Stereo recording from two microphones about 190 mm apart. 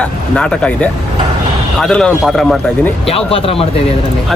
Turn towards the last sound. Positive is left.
turn(degrees=30)  # may be behind; listen again after turning